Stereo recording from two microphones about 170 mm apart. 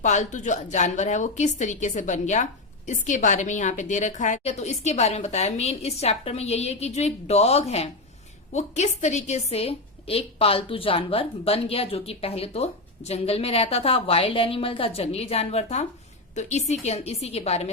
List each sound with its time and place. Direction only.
0.0 s a woman's voice: 45° left (ahead or behind)